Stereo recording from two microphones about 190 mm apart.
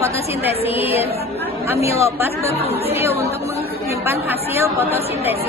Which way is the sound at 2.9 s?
15° right (ahead or behind).